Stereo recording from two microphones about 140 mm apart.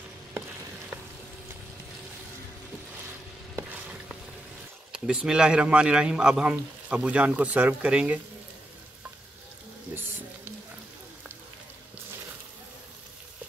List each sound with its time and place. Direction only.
4.9 s speech: 5° right (ahead or behind)
9.9 s frying: 15° right (ahead or behind)